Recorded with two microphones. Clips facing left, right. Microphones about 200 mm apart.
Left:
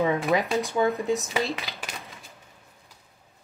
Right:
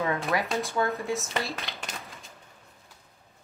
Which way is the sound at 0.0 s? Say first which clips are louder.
Left 5 dB; 15° left (ahead or behind).